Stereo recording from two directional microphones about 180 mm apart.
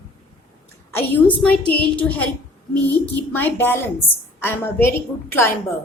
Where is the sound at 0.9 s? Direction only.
10° left (ahead or behind).